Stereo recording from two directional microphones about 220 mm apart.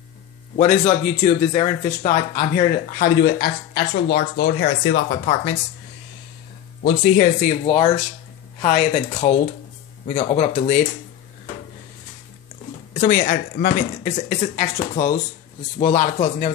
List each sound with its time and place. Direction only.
0.6 s speech: 30° left (ahead or behind); by 5.3 s 50° left (ahead or behind)
6.8 s speech: 45° left (ahead or behind)
12.9 s speech: 40° left (ahead or behind)